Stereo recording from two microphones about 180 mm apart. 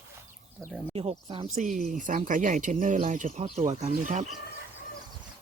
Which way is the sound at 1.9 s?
45° right (ahead or behind).